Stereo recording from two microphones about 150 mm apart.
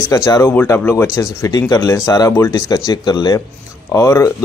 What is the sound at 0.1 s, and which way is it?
Speech, 20° left (ahead or behind).